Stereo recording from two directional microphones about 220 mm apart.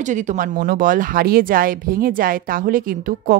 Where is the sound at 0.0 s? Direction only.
35° right (ahead or behind).